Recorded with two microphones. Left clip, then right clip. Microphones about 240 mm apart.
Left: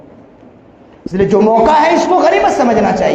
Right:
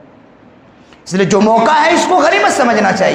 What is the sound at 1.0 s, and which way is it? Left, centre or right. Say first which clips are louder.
A man's voice: left 1 dB; right.